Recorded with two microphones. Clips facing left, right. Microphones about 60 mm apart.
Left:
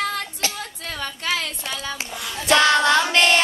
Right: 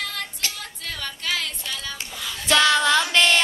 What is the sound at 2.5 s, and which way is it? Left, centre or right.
Child singing, centre.